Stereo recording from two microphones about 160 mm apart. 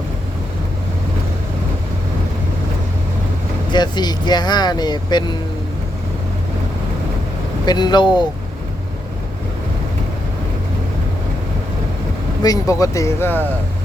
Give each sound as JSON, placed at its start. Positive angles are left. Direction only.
{"t": 3.7, "sound": "speech", "side_deg": 25}
{"t": 7.6, "sound": "speech", "side_deg": 25}
{"t": 12.4, "sound": "speech", "side_deg": 20}